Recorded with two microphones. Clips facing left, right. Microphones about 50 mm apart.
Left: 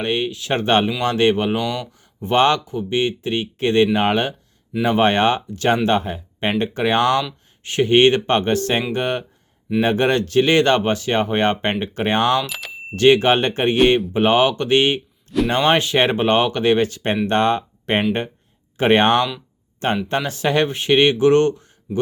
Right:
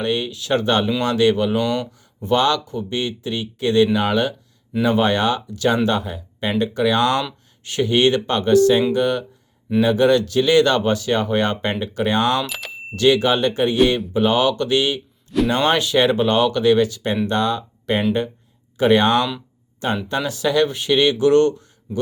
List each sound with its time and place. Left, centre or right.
0.0 s speech: left
1.6 s speech: centre
2.0 s speech: left
12.5 s a sound: centre
13.0 s speech: left